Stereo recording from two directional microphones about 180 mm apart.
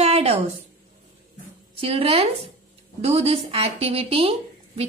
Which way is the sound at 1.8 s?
35° right (ahead or behind).